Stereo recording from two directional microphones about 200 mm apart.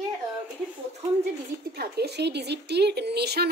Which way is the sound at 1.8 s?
55° right (ahead or behind).